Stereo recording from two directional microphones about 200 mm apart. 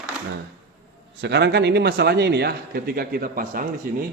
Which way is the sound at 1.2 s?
60° right (ahead or behind).